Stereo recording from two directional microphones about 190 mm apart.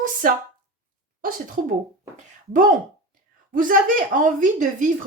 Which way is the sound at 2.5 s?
45° right (ahead or behind).